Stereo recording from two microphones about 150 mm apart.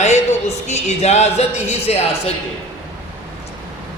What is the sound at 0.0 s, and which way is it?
Speech, 50° left (ahead or behind).